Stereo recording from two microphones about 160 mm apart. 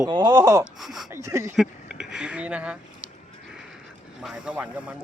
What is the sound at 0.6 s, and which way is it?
Speech, centre (ahead or behind).